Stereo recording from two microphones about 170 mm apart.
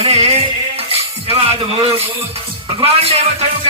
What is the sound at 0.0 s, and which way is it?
Music, 40° right (ahead or behind).